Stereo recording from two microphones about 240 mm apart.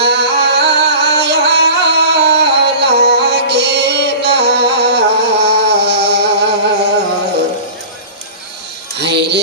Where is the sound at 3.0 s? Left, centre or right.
Right.